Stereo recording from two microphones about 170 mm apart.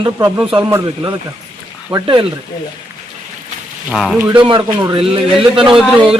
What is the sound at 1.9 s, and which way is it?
Speech, 30° right (ahead or behind).